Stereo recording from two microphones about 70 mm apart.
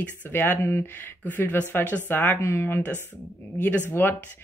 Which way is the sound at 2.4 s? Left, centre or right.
Left.